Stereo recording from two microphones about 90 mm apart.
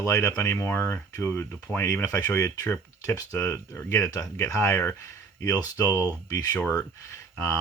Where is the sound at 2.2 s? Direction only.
40° left (ahead or behind).